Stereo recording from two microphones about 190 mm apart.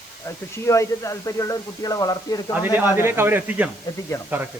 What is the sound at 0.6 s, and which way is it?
A man's voice, 15° left (ahead or behind).